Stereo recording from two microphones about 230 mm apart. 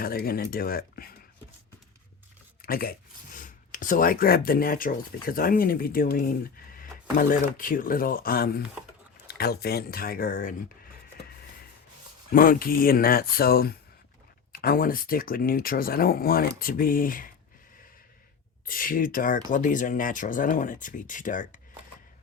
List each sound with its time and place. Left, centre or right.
0.0 s speech: left
2.6 s speech: left
12.3 s speech: left
18.6 s speech: left